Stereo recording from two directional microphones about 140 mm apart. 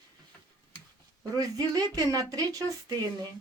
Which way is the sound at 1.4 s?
25° right (ahead or behind).